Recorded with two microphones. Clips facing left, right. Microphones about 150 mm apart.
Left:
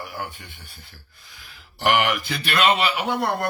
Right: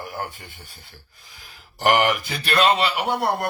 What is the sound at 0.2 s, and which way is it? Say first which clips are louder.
Speech: right 2 dB; 40° right (ahead or behind).